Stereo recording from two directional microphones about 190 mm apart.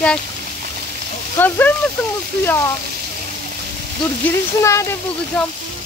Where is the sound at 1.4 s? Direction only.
10° left (ahead or behind).